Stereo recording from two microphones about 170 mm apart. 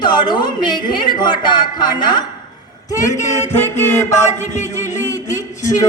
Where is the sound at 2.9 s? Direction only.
20° left (ahead or behind).